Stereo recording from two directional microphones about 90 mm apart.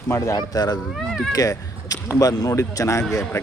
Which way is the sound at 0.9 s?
Centre (ahead or behind).